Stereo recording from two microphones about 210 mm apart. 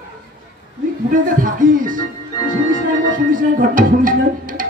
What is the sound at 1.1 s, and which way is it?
Speech, 40° right (ahead or behind).